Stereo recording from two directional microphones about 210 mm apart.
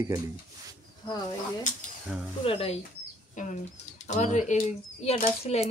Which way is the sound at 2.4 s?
25° left (ahead or behind).